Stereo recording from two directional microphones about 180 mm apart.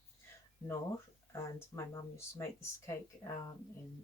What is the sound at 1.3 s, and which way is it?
Speech, 15° left (ahead or behind).